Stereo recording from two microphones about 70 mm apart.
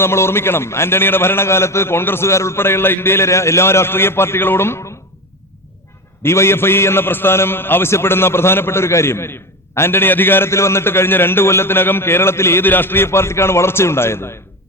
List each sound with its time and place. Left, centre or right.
0.0 s a man's voice: left
6.2 s a man's voice: left